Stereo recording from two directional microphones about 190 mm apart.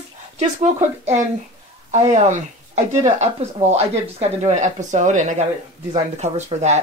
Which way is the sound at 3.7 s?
35° right (ahead or behind).